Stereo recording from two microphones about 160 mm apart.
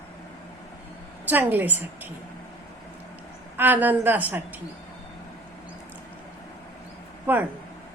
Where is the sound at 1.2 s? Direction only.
10° right (ahead or behind).